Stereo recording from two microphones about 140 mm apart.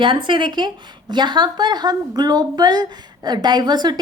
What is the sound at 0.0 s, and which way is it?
A woman's voice, 35° right (ahead or behind).